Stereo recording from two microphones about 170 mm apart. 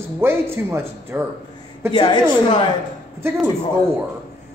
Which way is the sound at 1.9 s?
25° left (ahead or behind).